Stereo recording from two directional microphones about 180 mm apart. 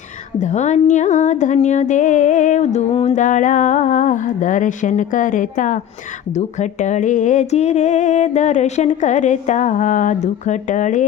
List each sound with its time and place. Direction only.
0.3 s music: 40° left (ahead or behind)
6.3 s speech: 40° left (ahead or behind)